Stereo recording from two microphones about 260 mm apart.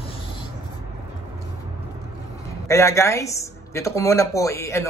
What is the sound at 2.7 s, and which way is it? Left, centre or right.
A man's voice, centre.